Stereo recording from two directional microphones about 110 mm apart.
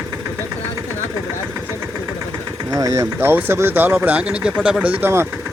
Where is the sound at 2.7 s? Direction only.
30° right (ahead or behind); by 5.1 s 10° right (ahead or behind).